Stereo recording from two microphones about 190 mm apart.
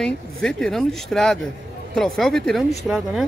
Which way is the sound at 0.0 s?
5° left (ahead or behind).